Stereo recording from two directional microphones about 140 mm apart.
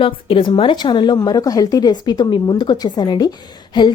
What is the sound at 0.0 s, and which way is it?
A woman's voice, 40° left (ahead or behind).